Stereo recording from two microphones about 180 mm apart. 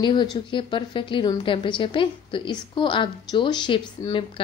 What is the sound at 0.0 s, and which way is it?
A woman's voice, 25° left (ahead or behind).